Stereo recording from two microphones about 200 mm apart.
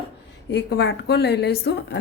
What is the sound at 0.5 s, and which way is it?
A woman's voice, 60° left (ahead or behind).